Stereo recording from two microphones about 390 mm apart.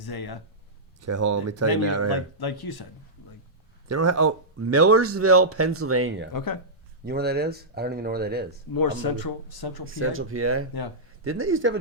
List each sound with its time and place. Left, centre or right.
0.0 s speech: left
1.0 s speech: right
2.0 s speech: left
3.8 s speech: right
6.3 s speech: left
7.0 s speech: right
8.7 s speech: left
9.8 s speech: right